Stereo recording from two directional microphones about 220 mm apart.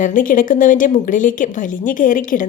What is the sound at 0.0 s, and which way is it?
A woman's voice, 40° left (ahead or behind).